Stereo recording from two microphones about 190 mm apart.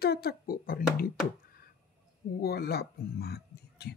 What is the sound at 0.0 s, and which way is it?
Speech, 55° left (ahead or behind).